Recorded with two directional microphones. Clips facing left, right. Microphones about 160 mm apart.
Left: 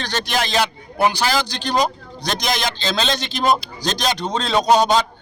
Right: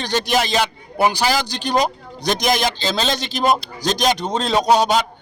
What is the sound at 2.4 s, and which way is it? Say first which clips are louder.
Speech: right 4 dB; 50° right (ahead or behind).